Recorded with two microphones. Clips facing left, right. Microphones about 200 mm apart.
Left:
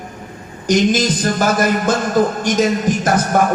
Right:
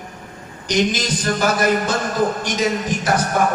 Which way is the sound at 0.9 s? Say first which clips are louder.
Left 5 dB; 50° left (ahead or behind).